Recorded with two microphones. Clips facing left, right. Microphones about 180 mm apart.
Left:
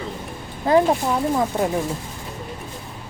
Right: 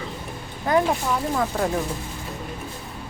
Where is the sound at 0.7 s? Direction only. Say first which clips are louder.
Left 4 dB; 30° left (ahead or behind).